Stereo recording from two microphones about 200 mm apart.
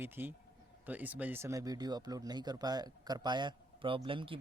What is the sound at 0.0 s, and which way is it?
Speech, 10° right (ahead or behind).